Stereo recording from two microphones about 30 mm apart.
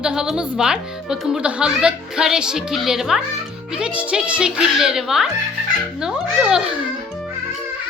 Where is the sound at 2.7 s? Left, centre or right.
Centre.